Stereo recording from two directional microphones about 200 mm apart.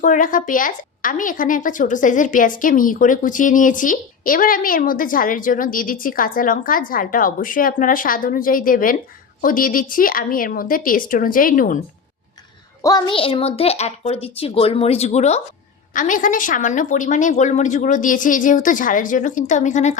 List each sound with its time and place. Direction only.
0.0 s a woman's voice: 40° left (ahead or behind)
12.8 s a child's voice: 20° left (ahead or behind); by 20.0 s 35° left (ahead or behind)